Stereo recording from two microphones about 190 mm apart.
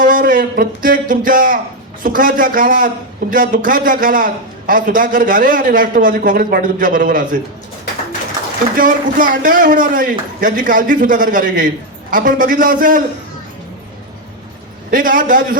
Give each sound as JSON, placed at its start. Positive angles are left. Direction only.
{"t": 0.0, "sound": "a man's voice", "side_deg": -45}
{"t": 8.7, "sound": "a man's voice", "side_deg": -45}
{"t": 14.8, "sound": "a man's voice", "side_deg": -45}